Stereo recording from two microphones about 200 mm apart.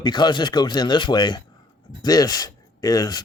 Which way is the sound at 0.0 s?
20° left (ahead or behind).